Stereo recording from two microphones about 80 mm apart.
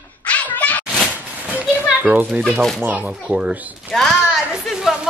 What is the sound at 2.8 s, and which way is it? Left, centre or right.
Speech, right.